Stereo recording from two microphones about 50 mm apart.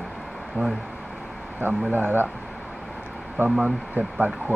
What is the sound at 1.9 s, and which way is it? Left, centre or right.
Speech, right.